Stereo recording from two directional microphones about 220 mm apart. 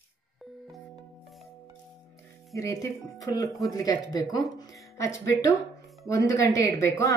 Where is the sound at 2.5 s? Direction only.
15° left (ahead or behind).